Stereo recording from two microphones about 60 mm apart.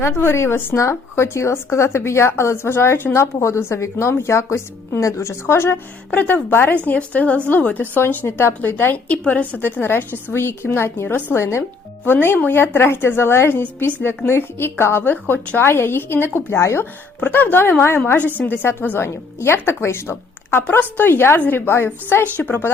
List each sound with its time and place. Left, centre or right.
0.0 s speech: left
6.1 s a woman's voice: left
6.8 s a woman's voice: left
9.0 s a woman's voice: left
12.0 s a woman's voice: left
13.5 s a woman's voice: left
17.2 s a woman's voice: left